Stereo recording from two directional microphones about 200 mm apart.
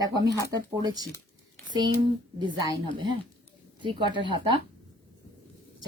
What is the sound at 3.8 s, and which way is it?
Speech, 25° right (ahead or behind).